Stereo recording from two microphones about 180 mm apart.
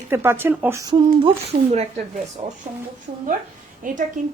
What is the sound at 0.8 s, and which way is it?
Speech, 30° right (ahead or behind).